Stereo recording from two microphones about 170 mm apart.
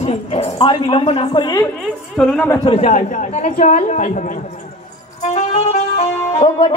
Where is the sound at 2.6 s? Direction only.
40° left (ahead or behind).